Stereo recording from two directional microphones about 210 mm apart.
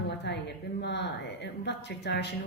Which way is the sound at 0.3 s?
50° left (ahead or behind).